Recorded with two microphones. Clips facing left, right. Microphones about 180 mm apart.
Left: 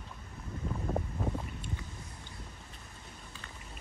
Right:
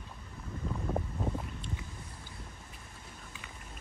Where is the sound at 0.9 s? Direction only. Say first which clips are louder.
Even; centre (ahead or behind).